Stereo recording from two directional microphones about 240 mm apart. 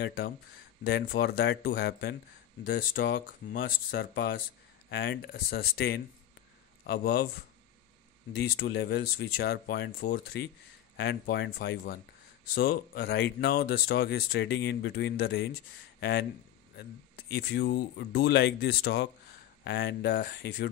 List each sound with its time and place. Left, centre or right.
0.0 s speech: left
8.4 s speech: left
17.3 s speech: left